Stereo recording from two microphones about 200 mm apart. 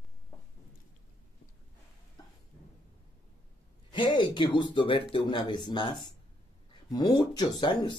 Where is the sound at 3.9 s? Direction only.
25° left (ahead or behind).